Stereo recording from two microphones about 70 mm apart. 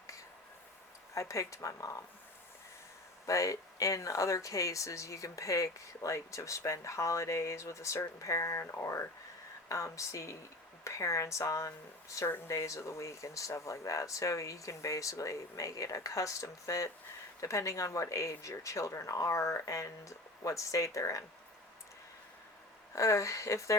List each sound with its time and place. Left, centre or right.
1.1 s speech: left
3.2 s speech: left
22.9 s speech: left